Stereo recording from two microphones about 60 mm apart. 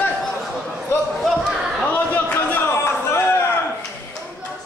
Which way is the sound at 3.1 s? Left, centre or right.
Left.